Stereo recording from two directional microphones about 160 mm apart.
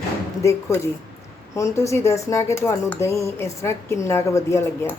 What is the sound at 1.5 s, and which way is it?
Speech, 20° left (ahead or behind).